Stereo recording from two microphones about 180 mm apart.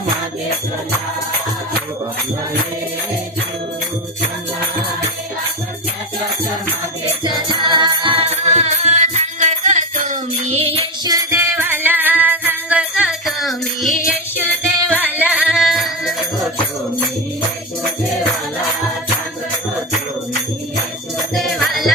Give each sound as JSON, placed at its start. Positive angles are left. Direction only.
{"t": 7.7, "sound": "music", "side_deg": -25}
{"t": 11.1, "sound": "music", "side_deg": -15}
{"t": 21.3, "sound": "music", "side_deg": 0}